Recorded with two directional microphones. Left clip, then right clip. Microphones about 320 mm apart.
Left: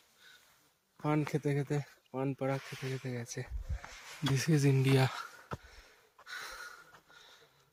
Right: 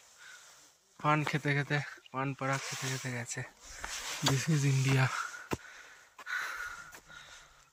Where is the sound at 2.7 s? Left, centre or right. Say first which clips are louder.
Right 3 dB; right.